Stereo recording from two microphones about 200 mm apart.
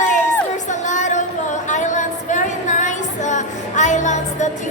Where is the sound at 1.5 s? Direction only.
35° left (ahead or behind).